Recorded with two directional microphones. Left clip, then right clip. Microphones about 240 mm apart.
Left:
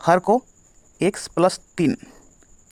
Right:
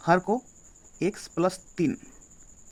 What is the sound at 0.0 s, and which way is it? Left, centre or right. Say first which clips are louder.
Speech: left 7 dB; left.